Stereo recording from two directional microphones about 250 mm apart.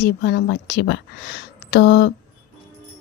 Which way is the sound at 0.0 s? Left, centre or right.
Left.